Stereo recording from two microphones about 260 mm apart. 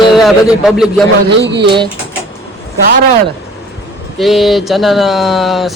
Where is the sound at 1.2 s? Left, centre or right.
Right.